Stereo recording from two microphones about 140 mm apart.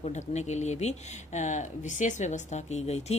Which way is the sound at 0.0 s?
55° left (ahead or behind).